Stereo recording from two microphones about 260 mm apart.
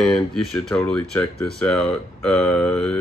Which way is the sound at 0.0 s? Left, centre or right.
Centre.